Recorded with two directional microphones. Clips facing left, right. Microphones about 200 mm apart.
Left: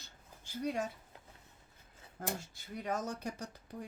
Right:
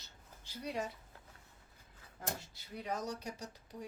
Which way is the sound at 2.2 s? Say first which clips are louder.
Left 3 dB; 50° left (ahead or behind).